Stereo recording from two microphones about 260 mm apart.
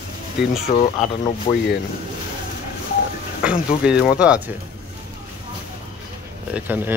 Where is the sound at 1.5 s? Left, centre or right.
Left.